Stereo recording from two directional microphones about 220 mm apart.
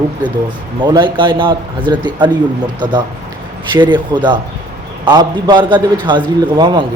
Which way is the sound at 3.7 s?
20° right (ahead or behind).